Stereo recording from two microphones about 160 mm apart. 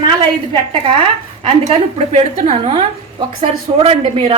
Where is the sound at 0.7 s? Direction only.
35° right (ahead or behind).